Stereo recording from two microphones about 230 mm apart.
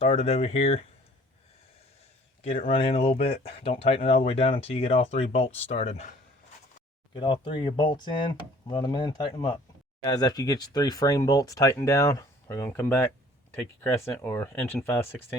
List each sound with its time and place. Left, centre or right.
0.0 s speech: left
2.6 s speech: left